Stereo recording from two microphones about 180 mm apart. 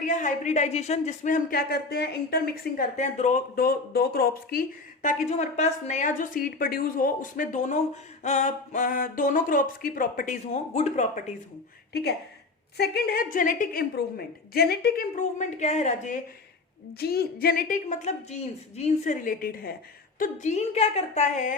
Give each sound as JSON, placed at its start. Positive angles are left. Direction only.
{"t": 0.0, "sound": "a woman's voice", "side_deg": 45}
{"t": 3.0, "sound": "speech", "side_deg": 40}
{"t": 5.0, "sound": "a woman's voice", "side_deg": 40}
{"t": 12.7, "sound": "a woman's voice", "side_deg": 60}
{"t": 17.0, "sound": "a woman's voice", "side_deg": 60}